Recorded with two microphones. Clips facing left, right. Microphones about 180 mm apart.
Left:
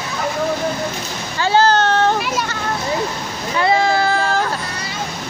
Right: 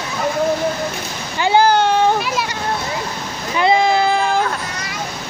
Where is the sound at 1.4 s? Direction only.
15° right (ahead or behind).